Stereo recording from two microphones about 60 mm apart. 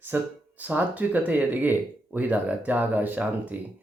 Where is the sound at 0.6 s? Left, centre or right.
Right.